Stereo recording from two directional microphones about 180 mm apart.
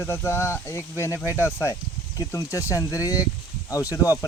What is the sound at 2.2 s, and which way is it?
Speech, 20° left (ahead or behind).